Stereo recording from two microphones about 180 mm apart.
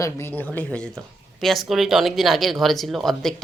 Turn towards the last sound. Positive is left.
turn(degrees=0)  # may be behind; listen again after turning